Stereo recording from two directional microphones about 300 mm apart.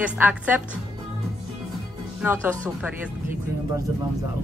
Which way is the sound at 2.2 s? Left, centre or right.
Centre.